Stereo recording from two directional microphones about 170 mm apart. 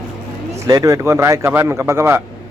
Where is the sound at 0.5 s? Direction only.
20° right (ahead or behind).